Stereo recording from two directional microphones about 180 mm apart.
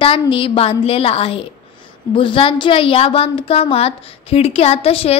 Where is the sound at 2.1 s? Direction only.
30° left (ahead or behind).